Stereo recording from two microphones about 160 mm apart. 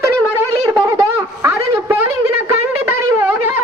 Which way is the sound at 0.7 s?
20° right (ahead or behind).